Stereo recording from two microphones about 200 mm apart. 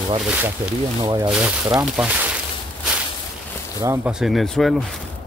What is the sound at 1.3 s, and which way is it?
Speech, 5° right (ahead or behind).